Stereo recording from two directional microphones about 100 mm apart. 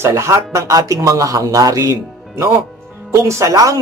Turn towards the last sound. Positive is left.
turn(degrees=-35)  # may be behind; listen again after turning